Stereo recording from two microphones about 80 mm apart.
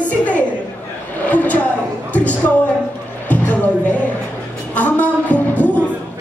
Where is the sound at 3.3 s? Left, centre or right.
Centre.